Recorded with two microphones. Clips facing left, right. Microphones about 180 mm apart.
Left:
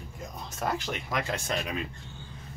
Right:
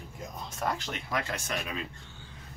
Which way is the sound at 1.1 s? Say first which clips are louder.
Left 1 dB; 20° left (ahead or behind).